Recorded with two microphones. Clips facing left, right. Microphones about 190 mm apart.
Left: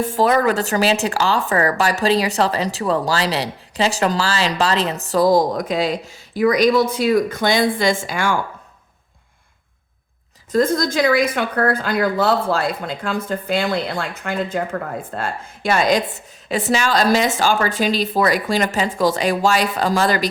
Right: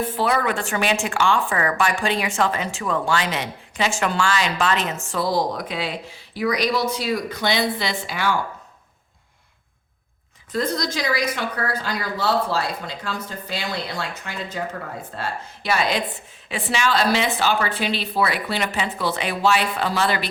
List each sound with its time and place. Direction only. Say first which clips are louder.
0.1 s a woman's voice: left 6 dB; 40° left (ahead or behind)
10.5 s a woman's voice: left 7 dB; 45° left (ahead or behind)